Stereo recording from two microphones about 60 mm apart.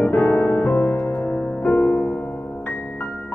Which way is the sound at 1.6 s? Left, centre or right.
Left.